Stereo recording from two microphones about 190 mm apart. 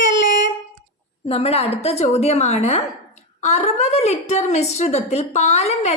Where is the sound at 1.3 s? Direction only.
30° left (ahead or behind).